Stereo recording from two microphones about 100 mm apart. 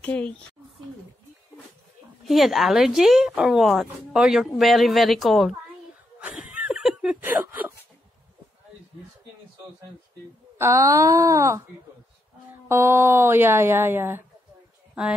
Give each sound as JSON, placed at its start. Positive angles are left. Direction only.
{"t": 0.0, "sound": "speech", "side_deg": 15}
{"t": 2.2, "sound": "speech", "side_deg": 0}
{"t": 6.1, "sound": "a sound", "side_deg": -10}
{"t": 7.2, "sound": "whimper", "side_deg": -20}
{"t": 10.6, "sound": "speech", "side_deg": -30}
{"t": 12.6, "sound": "a woman's voice", "side_deg": -25}